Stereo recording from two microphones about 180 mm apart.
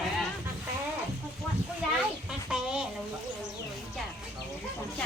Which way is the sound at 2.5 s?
5° right (ahead or behind).